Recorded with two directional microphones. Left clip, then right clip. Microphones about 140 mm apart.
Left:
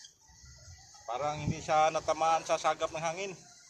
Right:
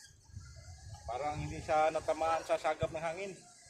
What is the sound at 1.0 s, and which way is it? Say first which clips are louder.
A man's voice: left 4 dB; 20° left (ahead or behind).